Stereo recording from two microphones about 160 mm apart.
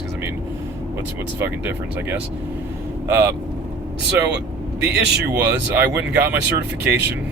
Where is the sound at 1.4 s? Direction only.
15° right (ahead or behind).